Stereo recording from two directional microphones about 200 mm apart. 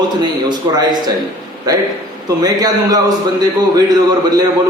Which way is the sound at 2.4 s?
20° right (ahead or behind).